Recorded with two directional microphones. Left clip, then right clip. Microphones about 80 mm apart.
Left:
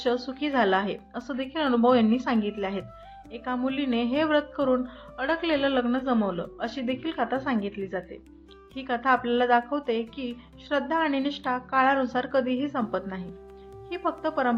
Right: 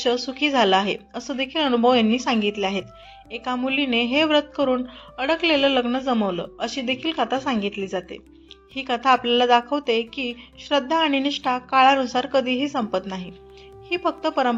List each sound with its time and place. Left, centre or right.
0.0 s a woman's voice: right